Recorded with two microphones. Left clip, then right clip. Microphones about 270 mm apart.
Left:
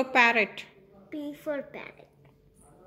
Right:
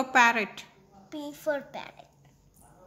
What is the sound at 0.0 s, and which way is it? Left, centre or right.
Speech, centre.